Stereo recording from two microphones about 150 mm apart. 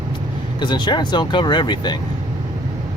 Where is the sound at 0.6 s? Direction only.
30° left (ahead or behind).